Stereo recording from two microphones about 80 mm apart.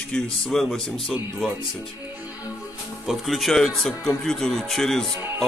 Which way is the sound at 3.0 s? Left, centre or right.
Centre.